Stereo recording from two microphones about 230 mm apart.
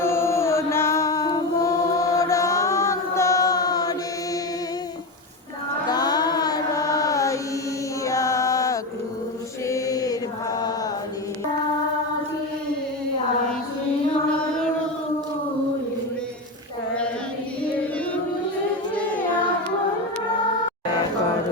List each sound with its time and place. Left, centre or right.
0.0 s chant: centre
2.1 s mantra: centre
5.9 s carnatic music: centre
8.0 s music: centre
9.6 s mantra: centre
17.6 s music: centre